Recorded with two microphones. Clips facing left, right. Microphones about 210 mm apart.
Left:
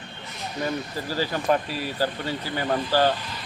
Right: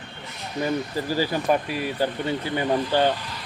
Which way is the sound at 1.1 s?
15° right (ahead or behind).